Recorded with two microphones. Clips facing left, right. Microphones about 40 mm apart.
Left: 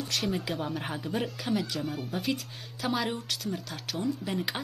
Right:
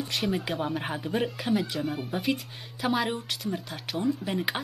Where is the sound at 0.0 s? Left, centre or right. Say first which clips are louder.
Right 2 dB; centre.